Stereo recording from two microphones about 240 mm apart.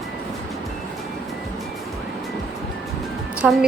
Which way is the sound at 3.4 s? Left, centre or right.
Centre.